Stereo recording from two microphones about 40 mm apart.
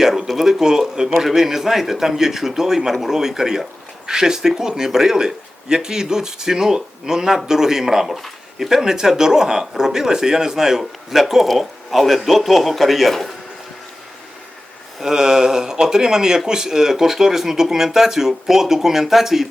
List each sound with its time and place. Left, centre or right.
0.0 s a sound: centre
0.3 s speech: centre
15.0 s speech: centre